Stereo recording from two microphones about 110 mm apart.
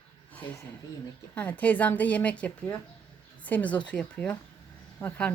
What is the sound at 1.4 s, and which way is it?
Speech, 15° left (ahead or behind).